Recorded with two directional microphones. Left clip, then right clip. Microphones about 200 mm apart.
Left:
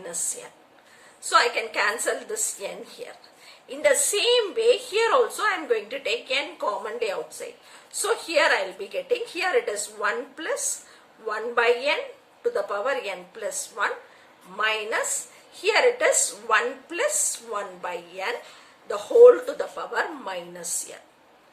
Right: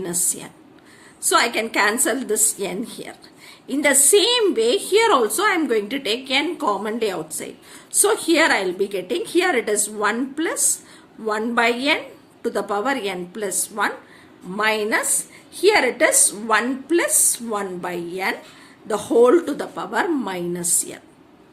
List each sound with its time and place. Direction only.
1.3 s a woman's voice: 50° right (ahead or behind)